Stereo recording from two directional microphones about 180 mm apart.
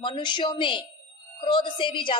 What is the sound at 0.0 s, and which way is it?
A woman's voice, 25° left (ahead or behind).